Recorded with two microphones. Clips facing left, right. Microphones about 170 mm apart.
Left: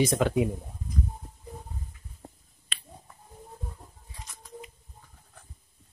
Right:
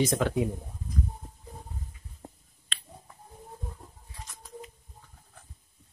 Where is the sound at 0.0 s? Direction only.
15° left (ahead or behind).